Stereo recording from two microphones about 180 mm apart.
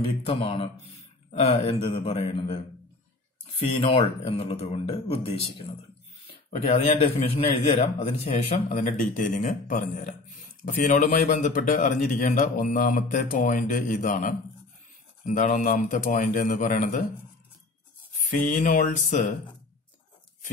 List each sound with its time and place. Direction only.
0.3 s a man's voice: 30° left (ahead or behind); by 17.0 s 45° left (ahead or behind)
18.3 s a man's voice: 45° left (ahead or behind)